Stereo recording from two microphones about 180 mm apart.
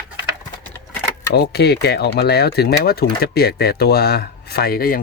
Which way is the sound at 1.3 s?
60° left (ahead or behind).